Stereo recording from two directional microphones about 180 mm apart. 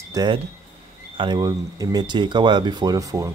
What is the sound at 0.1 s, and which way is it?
Speech, 25° right (ahead or behind).